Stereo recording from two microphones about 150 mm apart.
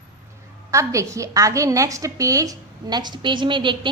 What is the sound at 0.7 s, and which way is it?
A woman's voice, 20° right (ahead or behind).